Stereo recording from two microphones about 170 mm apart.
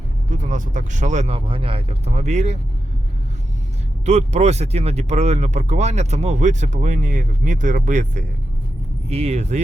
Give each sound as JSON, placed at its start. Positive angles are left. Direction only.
{"t": 0.3, "sound": "speech", "side_deg": -50}
{"t": 4.0, "sound": "speech", "side_deg": -40}